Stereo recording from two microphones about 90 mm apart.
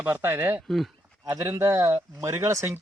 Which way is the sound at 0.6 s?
Centre (ahead or behind).